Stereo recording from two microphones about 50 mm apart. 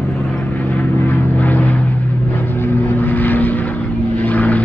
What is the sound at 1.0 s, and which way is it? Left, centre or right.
Vehicle, left.